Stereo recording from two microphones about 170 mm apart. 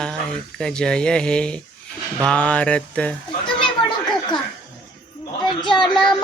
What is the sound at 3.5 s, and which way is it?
Children playing, 25° left (ahead or behind).